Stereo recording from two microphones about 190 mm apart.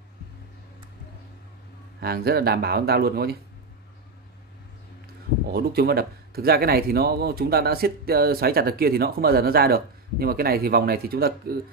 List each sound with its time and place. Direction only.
2.0 s speech: 55° right (ahead or behind)
5.5 s speech: 55° right (ahead or behind)